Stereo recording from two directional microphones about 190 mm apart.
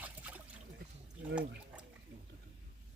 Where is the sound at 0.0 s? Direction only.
10° right (ahead or behind).